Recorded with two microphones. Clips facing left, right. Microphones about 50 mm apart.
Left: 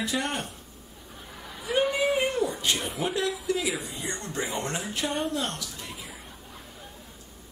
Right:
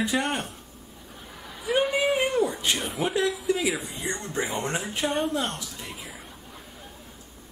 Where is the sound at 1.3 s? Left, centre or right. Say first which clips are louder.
Right 2 dB; centre.